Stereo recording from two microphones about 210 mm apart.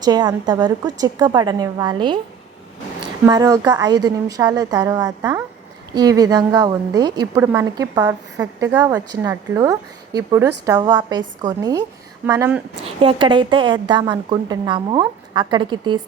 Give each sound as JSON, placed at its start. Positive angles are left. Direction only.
{"t": 0.0, "sound": "a woman's voice", "side_deg": -20}
{"t": 3.2, "sound": "a woman's voice", "side_deg": -20}
{"t": 13.0, "sound": "a woman's voice", "side_deg": -25}